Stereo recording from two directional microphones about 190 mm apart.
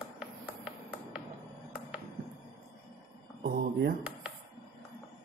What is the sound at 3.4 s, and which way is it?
Mantra, 50° right (ahead or behind).